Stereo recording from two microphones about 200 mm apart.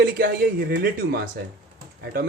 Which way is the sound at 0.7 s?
45° right (ahead or behind).